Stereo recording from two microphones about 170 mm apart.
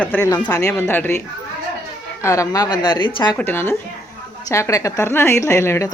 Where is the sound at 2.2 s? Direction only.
20° left (ahead or behind).